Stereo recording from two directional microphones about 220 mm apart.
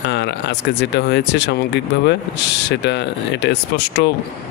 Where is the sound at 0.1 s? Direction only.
50° left (ahead or behind).